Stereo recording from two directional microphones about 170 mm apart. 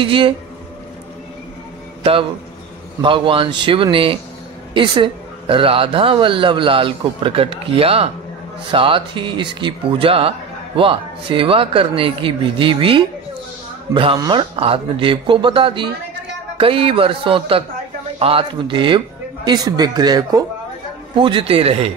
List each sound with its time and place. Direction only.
0.0 s a man's voice: 30° right (ahead or behind)
3.0 s a man's voice: 30° right (ahead or behind)